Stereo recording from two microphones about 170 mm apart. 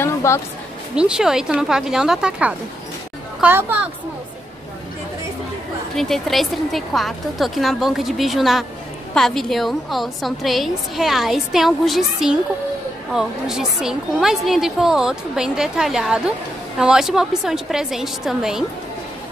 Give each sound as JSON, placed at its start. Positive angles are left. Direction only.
{"t": 0.0, "sound": "music", "side_deg": 15}
{"t": 0.9, "sound": "a woman's voice", "side_deg": -5}
{"t": 5.9, "sound": "a woman's voice", "side_deg": 0}